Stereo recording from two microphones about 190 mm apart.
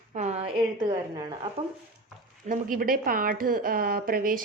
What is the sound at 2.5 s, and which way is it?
A woman's voice, 45° right (ahead or behind).